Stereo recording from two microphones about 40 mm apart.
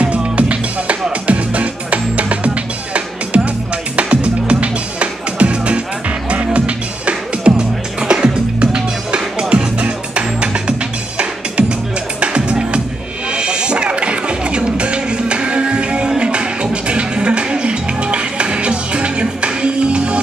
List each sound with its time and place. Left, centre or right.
0.0 s music: right
12.2 s music: right